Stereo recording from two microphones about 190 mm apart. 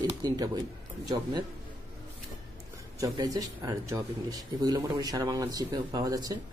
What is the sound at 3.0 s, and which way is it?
Speech, 20° right (ahead or behind).